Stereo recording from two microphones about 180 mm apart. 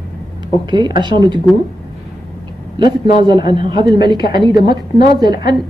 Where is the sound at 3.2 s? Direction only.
25° right (ahead or behind).